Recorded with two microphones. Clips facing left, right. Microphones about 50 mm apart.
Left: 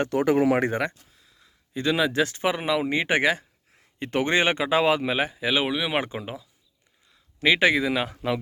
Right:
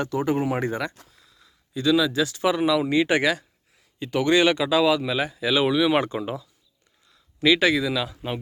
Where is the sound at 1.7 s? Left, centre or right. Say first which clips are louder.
Right 2 dB; left.